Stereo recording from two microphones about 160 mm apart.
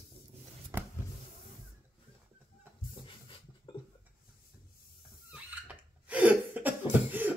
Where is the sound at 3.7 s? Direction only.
30° left (ahead or behind).